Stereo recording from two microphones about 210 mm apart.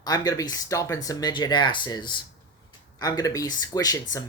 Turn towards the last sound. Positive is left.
turn(degrees=15)  # may be behind; listen again after turning